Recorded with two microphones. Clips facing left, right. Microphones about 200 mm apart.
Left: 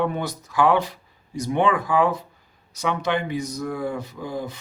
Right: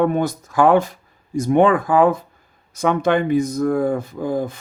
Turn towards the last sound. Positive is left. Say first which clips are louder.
# right 8 dB
turn(degrees=-50)  # may be behind; listen again after turning